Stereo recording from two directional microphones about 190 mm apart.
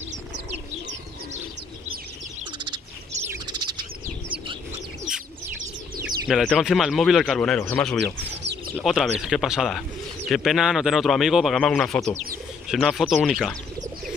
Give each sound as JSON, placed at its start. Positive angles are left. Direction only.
{"t": 3.4, "sound": "bird", "side_deg": -25}
{"t": 6.2, "sound": "speech", "side_deg": 0}
{"t": 8.0, "sound": "bird", "side_deg": -65}
{"t": 8.7, "sound": "speech", "side_deg": 0}